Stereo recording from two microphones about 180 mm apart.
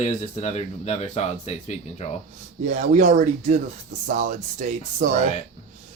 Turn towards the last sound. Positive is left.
turn(degrees=-45)  # may be behind; listen again after turning